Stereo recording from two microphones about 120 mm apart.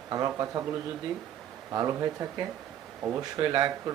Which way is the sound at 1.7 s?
30° right (ahead or behind).